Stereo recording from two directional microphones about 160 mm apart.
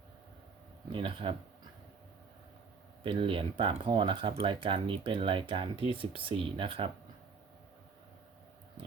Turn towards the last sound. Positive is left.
turn(degrees=-35)  # may be behind; listen again after turning